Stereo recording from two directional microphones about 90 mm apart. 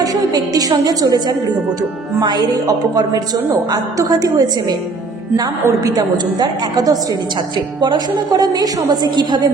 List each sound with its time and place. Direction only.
0.0 s a woman's voice: 45° right (ahead or behind)
3.7 s a woman's voice: 45° right (ahead or behind)
5.6 s a woman's voice: 40° right (ahead or behind)